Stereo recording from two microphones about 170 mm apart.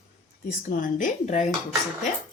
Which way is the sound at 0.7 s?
55° left (ahead or behind).